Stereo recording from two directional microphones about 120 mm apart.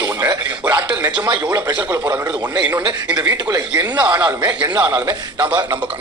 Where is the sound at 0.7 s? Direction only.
40° right (ahead or behind).